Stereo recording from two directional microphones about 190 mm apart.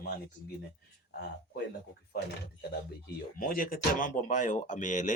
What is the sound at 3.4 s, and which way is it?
Speech, 45° left (ahead or behind).